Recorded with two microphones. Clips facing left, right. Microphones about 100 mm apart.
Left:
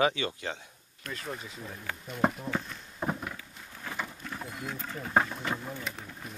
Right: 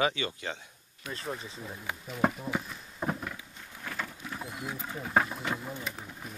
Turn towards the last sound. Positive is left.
turn(degrees=-5)  # may be behind; listen again after turning